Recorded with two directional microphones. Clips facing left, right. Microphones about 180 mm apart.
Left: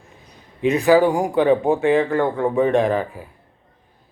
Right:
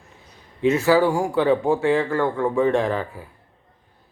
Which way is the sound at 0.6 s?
15° left (ahead or behind).